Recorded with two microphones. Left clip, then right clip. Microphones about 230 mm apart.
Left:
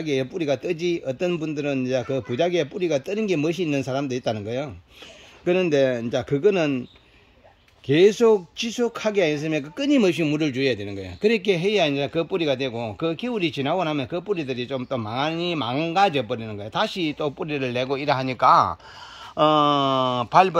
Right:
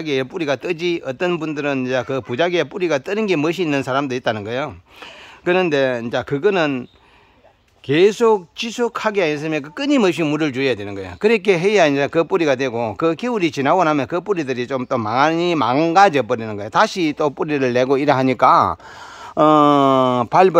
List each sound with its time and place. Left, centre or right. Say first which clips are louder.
0.1 s speech: right 4 dB; centre
0.7 s a man's voice: right 4 dB; right
1.0 s speech: right 4 dB; centre
8.2 s speech: right 3 dB; centre
15.0 s speech: right 11 dB; right
15.7 s speech: right 7 dB; right